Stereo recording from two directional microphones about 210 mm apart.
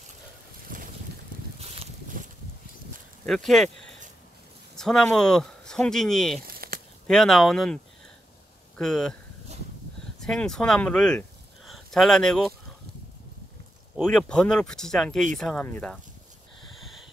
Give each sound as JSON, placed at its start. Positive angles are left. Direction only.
{"t": 1.6, "sound": "boat", "side_deg": -30}
{"t": 3.3, "sound": "speech", "side_deg": 0}
{"t": 6.4, "sound": "a sound", "side_deg": -45}
{"t": 7.1, "sound": "speech", "side_deg": 0}
{"t": 10.2, "sound": "speech", "side_deg": 5}
{"t": 13.9, "sound": "speech", "side_deg": 5}